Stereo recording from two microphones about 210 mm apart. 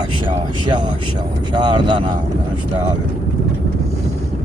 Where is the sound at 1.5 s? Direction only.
20° right (ahead or behind).